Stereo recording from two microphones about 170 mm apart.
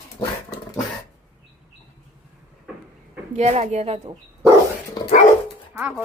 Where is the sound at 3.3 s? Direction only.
40° right (ahead or behind).